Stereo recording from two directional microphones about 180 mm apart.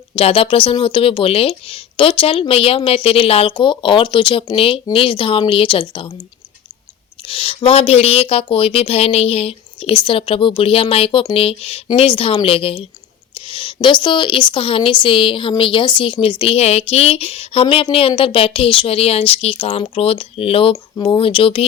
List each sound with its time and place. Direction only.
0.2 s speech: 30° left (ahead or behind)
7.3 s speech: 30° left (ahead or behind)